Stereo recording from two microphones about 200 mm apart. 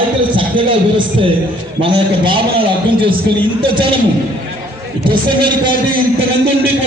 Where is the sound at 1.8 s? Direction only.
25° right (ahead or behind).